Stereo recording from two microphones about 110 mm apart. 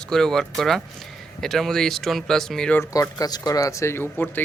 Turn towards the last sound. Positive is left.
turn(degrees=20)  # may be behind; listen again after turning